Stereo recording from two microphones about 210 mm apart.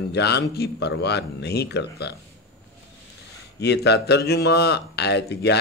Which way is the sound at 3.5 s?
50° left (ahead or behind).